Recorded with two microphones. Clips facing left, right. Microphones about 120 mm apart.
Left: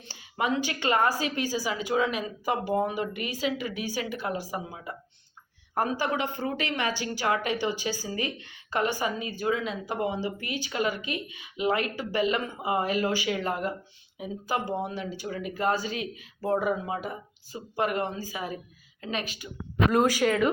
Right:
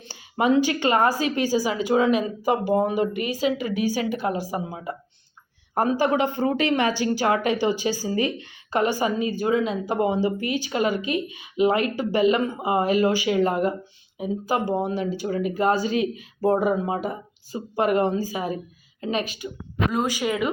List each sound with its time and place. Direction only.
0.3 s a woman's voice: 25° right (ahead or behind)
19.9 s speech: centre (ahead or behind)
20.2 s speech: 10° right (ahead or behind)